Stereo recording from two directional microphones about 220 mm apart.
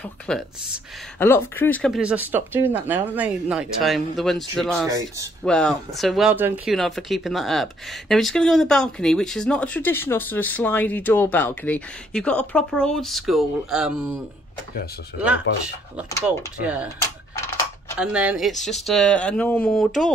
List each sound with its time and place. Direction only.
0.3 s speech: 5° left (ahead or behind)
4.8 s speech: 15° right (ahead or behind)
5.4 s speech: centre (ahead or behind)
15.1 s speech: 50° left (ahead or behind)
16.3 s speech: 5° right (ahead or behind)
17.9 s speech: 5° right (ahead or behind)